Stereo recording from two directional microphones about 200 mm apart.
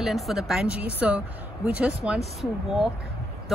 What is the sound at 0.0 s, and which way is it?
A woman's voice, centre (ahead or behind).